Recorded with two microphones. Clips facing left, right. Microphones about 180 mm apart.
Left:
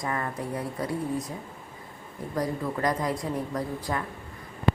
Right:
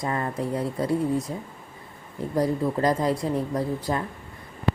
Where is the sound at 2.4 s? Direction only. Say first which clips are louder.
Right 5 dB; 30° right (ahead or behind).